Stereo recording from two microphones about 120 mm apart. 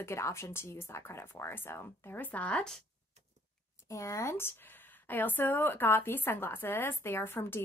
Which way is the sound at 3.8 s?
25° left (ahead or behind).